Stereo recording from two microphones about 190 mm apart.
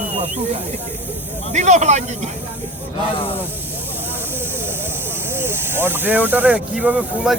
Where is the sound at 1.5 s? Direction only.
40° right (ahead or behind).